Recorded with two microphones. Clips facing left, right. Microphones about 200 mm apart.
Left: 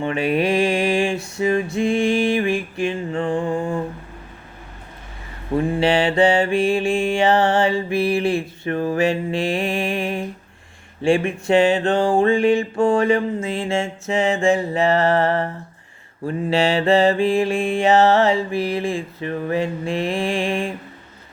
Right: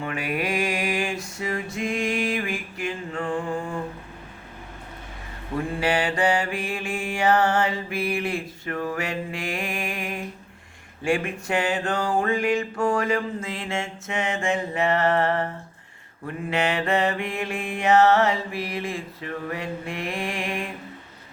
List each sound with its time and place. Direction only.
0.0 s music: 25° left (ahead or behind)
5.5 s mantra: 25° left (ahead or behind)